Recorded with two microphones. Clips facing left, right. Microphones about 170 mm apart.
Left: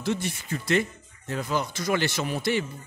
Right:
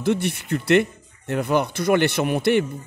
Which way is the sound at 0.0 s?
60° right (ahead or behind).